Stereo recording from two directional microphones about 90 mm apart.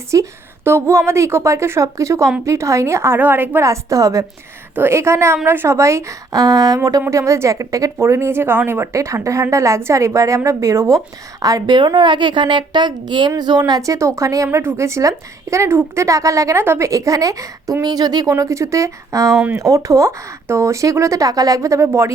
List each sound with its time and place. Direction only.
0.1 s a woman's voice: 30° right (ahead or behind)
3.6 s a woman's voice: 35° right (ahead or behind)
7.1 s a woman's voice: 35° right (ahead or behind)